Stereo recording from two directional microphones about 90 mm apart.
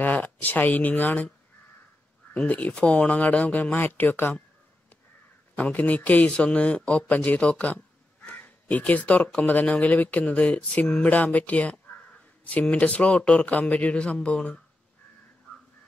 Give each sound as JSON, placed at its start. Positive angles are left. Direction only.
{"t": 0.0, "sound": "speech", "side_deg": 20}
{"t": 2.3, "sound": "speech", "side_deg": 15}
{"t": 5.6, "sound": "speech", "side_deg": 15}